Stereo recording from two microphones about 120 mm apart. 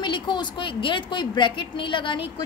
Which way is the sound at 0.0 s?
40° left (ahead or behind).